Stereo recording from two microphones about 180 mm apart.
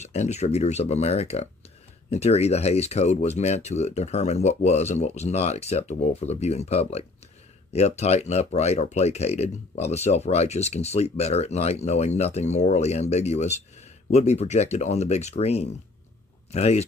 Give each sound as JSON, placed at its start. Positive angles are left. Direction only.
{"t": 0.0, "sound": "speech", "side_deg": 40}